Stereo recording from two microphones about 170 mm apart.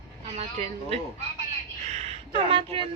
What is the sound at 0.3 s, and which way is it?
Speech, 40° right (ahead or behind).